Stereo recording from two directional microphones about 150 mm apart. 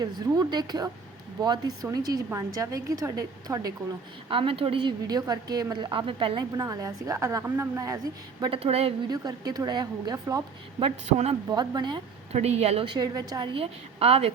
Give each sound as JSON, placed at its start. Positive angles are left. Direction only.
{"t": 0.0, "sound": "a woman's voice", "side_deg": -25}
{"t": 4.3, "sound": "a woman's voice", "side_deg": -35}
{"t": 8.4, "sound": "a woman's voice", "side_deg": -40}
{"t": 9.0, "sound": "a woman's voice", "side_deg": -25}
{"t": 10.8, "sound": "a woman's voice", "side_deg": -40}
{"t": 11.4, "sound": "a woman's voice", "side_deg": -25}
{"t": 12.3, "sound": "a woman's voice", "side_deg": -45}